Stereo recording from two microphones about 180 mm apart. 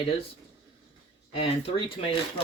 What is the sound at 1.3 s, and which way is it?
Speech, 30° left (ahead or behind).